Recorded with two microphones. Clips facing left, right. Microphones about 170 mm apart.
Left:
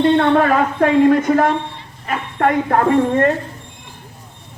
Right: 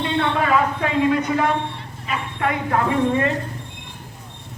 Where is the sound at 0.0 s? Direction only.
50° left (ahead or behind).